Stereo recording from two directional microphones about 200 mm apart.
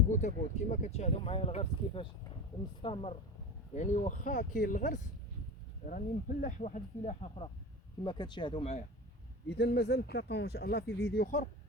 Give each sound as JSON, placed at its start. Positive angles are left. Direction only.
{"t": 0.1, "sound": "speech", "side_deg": 35}
{"t": 9.6, "sound": "speech", "side_deg": 55}